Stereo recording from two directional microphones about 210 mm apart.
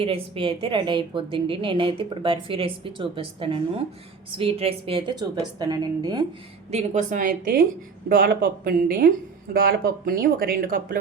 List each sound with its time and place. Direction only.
0.0 s a woman's voice: 25° right (ahead or behind)
6.7 s a woman's voice: 30° right (ahead or behind)